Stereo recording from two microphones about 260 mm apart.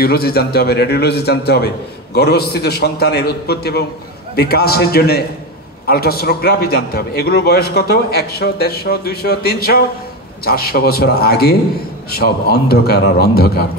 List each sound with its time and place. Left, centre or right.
0.0 s a man's voice: left